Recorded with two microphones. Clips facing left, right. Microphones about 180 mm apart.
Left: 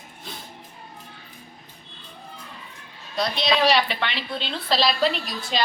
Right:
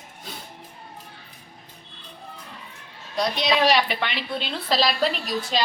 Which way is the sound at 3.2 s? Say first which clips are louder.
Even; 10° right (ahead or behind).